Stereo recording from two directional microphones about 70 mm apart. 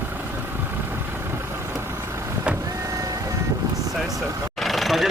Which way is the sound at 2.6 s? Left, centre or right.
Right.